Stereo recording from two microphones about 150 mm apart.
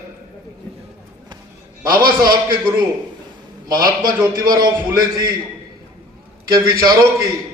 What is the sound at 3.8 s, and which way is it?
Speech, 70° right (ahead or behind).